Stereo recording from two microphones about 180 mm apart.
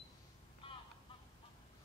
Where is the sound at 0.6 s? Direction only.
30° left (ahead or behind).